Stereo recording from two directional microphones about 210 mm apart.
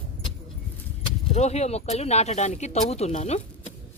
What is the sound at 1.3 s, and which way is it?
Speech, 30° left (ahead or behind).